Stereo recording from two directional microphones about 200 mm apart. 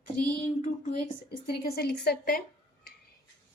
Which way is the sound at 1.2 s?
50° left (ahead or behind).